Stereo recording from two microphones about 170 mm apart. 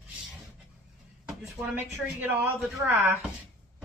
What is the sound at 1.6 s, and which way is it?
Speech, centre (ahead or behind).